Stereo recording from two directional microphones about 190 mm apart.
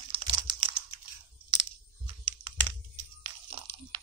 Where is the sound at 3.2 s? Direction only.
25° right (ahead or behind).